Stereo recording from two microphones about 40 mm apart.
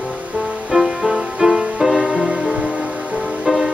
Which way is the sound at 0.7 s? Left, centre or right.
Right.